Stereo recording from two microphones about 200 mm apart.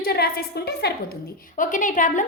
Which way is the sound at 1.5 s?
40° left (ahead or behind).